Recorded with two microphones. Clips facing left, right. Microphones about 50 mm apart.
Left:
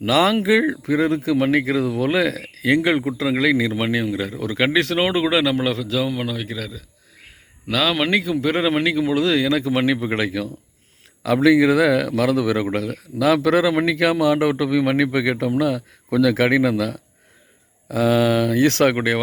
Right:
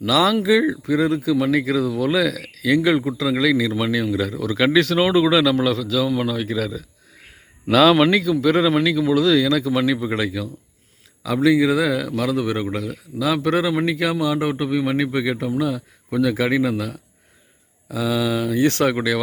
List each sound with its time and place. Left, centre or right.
0.0 s speech: left
0.9 s speech: left
6.1 s speech: centre
8.1 s a man's voice: left
12.7 s a man's voice: left